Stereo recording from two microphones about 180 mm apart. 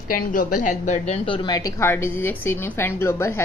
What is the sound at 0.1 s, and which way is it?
A woman's voice, 50° left (ahead or behind).